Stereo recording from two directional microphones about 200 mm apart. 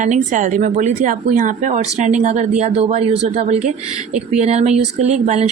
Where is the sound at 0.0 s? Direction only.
40° right (ahead or behind).